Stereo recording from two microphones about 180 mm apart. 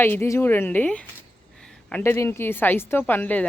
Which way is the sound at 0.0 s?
10° left (ahead or behind).